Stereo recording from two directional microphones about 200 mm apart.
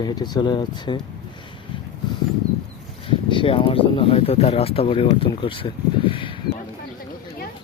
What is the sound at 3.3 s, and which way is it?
Speech, 25° left (ahead or behind).